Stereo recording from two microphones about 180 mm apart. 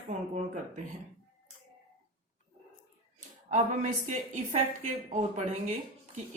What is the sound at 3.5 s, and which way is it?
A woman's voice, 40° right (ahead or behind).